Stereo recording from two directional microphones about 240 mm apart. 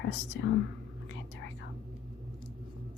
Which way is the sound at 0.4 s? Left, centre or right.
Left.